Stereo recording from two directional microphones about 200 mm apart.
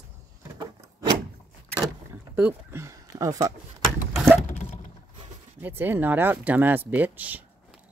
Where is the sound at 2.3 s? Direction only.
10° right (ahead or behind).